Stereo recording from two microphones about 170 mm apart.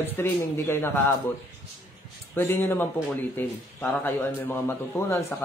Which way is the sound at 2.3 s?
15° left (ahead or behind).